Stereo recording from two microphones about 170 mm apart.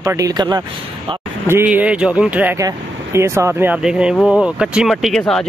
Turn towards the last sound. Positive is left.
turn(degrees=5)  # may be behind; listen again after turning